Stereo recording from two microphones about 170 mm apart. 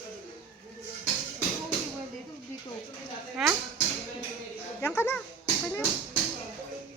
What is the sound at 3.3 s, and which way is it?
Speech, 10° right (ahead or behind).